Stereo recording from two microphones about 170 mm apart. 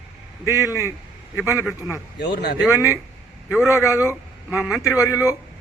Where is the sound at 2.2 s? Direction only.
80° left.